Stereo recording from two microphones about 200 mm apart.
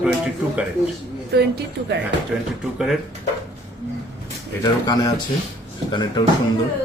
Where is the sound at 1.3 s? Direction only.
55° right (ahead or behind).